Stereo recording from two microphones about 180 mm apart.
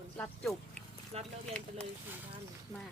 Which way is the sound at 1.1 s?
35° right (ahead or behind).